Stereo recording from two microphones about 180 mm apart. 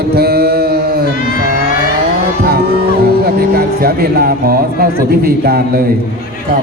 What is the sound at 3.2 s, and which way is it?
A man's voice, 60° right (ahead or behind).